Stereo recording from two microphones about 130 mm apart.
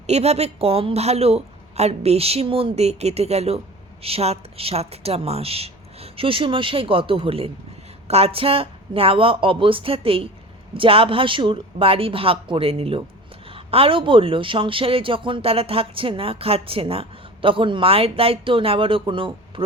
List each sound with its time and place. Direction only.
0.1 s a woman's voice: 55° right (ahead or behind)